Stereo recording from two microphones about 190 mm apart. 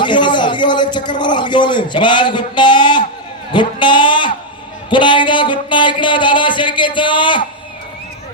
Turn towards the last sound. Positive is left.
turn(degrees=25)  # may be behind; listen again after turning